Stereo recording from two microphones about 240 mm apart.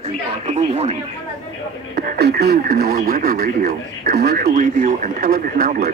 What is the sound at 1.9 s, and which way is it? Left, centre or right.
Speech, right.